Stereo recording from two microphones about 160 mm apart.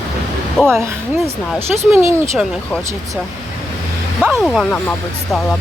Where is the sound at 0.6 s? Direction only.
15° right (ahead or behind).